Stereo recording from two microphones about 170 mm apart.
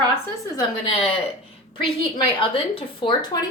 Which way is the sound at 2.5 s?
30° left (ahead or behind).